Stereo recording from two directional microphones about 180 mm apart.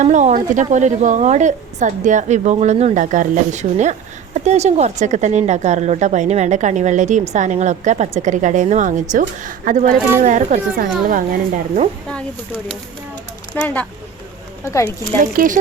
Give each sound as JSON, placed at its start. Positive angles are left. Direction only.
{"t": 0.0, "sound": "speech", "side_deg": -40}
{"t": 13.6, "sound": "speech", "side_deg": 10}
{"t": 15.2, "sound": "speech", "side_deg": -45}